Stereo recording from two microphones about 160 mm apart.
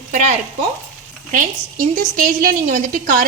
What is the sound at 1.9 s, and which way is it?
A woman's voice, 60° right (ahead or behind).